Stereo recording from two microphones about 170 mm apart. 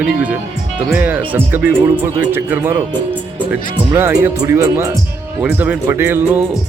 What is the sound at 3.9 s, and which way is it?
Speech, 15° right (ahead or behind).